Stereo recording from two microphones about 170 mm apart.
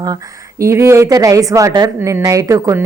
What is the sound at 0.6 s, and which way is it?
Speech, 15° right (ahead or behind).